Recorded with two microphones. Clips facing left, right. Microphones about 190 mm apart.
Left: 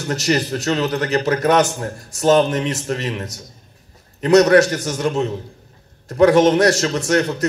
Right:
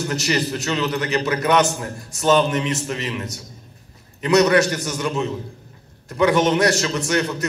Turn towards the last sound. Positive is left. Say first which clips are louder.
# left 4 dB
turn(degrees=40)  # may be behind; listen again after turning